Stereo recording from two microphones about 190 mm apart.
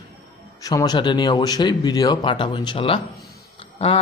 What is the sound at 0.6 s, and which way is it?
Speech, 20° left (ahead or behind).